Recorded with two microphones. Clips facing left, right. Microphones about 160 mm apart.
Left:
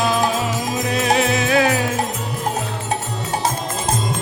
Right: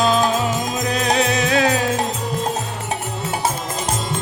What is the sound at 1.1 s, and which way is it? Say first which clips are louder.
Music: left 2 dB; 35° right (ahead or behind).